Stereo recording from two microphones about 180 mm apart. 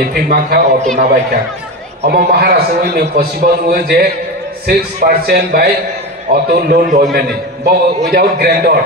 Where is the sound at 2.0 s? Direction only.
60° right (ahead or behind).